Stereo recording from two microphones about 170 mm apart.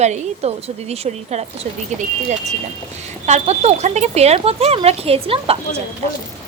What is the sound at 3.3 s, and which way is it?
A woman's voice, 40° right (ahead or behind).